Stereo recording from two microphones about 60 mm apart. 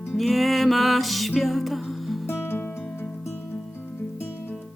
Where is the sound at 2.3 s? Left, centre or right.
Left.